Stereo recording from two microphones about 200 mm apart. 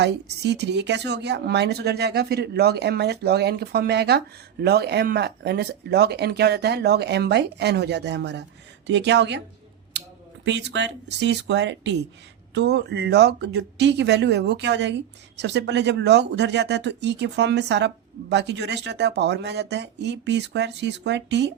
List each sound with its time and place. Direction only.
0.0 s speech: 55° right (ahead or behind)
10.4 s speech: 60° right (ahead or behind)